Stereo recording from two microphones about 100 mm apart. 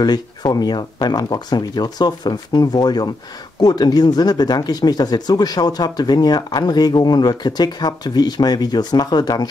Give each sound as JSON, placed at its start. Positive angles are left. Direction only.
{"t": 0.0, "sound": "speech", "side_deg": 45}